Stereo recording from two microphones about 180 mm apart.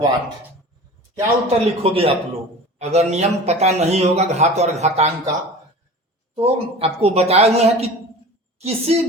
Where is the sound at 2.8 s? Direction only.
35° right (ahead or behind).